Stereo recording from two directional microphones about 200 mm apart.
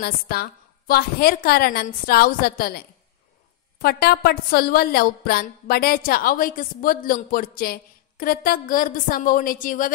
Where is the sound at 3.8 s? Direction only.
50° left (ahead or behind).